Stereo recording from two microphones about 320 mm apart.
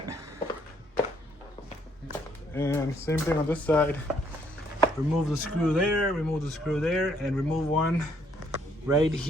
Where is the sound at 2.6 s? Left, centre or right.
Centre.